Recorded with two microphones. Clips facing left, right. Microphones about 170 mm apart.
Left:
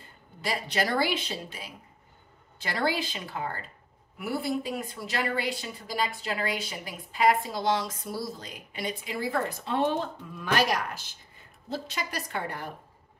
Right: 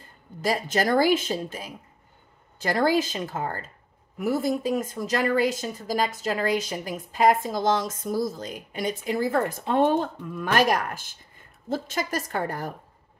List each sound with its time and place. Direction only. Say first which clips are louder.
0.4 s a woman's voice: right 5 dB; 45° right (ahead or behind)